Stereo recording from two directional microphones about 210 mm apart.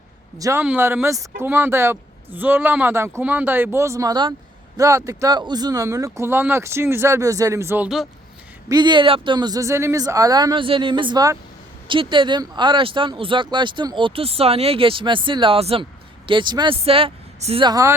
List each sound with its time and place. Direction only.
0.3 s speech: 15° right (ahead or behind)
8.7 s speech: 20° right (ahead or behind)